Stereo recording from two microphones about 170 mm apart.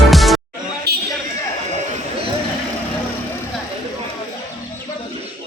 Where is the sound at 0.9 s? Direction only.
70° right (ahead or behind).